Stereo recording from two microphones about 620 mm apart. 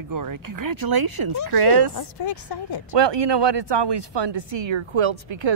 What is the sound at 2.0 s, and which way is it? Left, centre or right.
Speech, left.